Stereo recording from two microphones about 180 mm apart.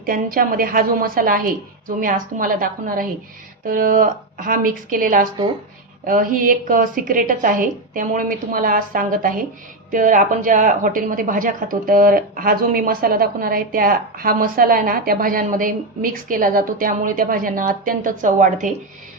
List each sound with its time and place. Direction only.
0.0 s speech: 50° right (ahead or behind)